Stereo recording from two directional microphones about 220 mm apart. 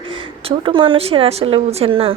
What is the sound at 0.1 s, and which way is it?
A woman's voice, 25° right (ahead or behind).